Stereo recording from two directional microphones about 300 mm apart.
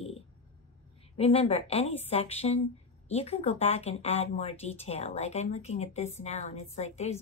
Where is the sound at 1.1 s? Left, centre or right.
Centre.